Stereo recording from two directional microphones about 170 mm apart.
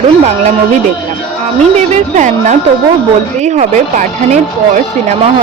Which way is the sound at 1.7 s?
45° right (ahead or behind).